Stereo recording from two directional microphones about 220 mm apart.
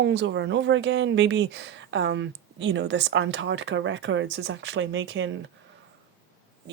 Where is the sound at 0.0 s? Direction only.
55° right (ahead or behind).